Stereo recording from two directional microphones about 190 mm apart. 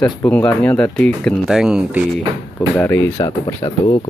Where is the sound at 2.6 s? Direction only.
10° left (ahead or behind).